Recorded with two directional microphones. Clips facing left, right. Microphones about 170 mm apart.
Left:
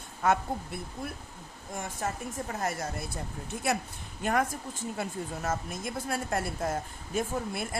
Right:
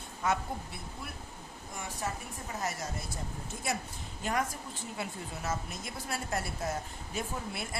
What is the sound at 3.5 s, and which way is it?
Speech, 65° left (ahead or behind).